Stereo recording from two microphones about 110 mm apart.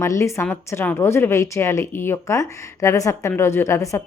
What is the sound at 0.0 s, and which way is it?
A woman's voice, 25° left (ahead or behind).